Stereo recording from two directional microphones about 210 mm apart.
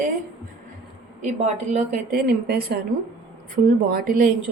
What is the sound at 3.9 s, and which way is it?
Speech, 45° right (ahead or behind).